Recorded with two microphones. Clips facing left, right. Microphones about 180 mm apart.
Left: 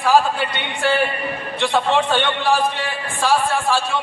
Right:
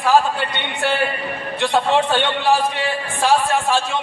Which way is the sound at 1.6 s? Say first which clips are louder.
Right 1 dB; 15° right (ahead or behind).